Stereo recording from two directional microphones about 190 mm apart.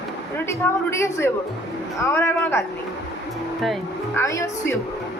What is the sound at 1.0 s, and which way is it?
Speech, 15° left (ahead or behind).